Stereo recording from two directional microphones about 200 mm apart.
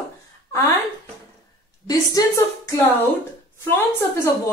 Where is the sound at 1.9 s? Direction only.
15° left (ahead or behind).